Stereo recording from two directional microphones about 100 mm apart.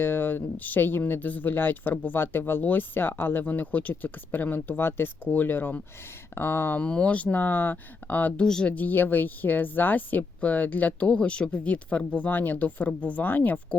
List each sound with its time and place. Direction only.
0.0 s speech: 20° left (ahead or behind)